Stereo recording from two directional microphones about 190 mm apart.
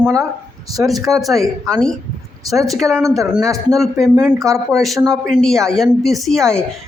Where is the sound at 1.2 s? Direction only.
Centre (ahead or behind).